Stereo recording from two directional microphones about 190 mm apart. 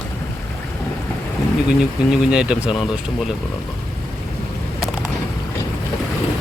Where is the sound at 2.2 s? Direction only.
5° right (ahead or behind).